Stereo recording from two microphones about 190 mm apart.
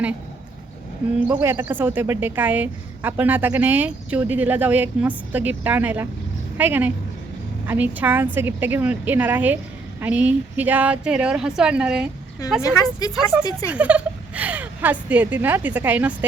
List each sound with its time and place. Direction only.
1.3 s a woman's voice: 15° right (ahead or behind)
12.6 s speech: 20° left (ahead or behind)
13.7 s speech: 5° right (ahead or behind)